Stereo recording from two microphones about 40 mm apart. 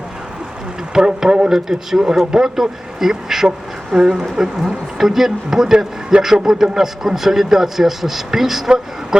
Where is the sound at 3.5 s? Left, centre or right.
Right.